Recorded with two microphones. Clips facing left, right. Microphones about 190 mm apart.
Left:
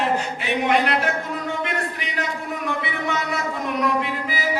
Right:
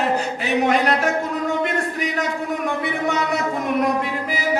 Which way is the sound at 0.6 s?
40° right (ahead or behind).